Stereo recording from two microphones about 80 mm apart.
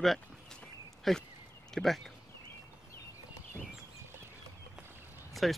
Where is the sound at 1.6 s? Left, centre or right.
Centre.